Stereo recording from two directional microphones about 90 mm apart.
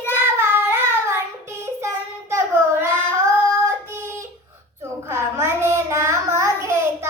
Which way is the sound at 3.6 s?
35° right (ahead or behind).